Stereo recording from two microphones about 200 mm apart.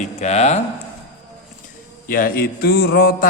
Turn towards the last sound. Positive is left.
turn(degrees=50)  # may be behind; listen again after turning